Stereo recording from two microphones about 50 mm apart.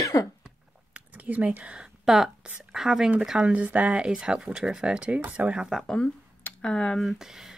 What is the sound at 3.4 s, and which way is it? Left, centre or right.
Speech, right.